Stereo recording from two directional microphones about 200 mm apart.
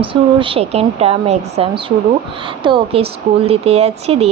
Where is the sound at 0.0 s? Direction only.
25° right (ahead or behind).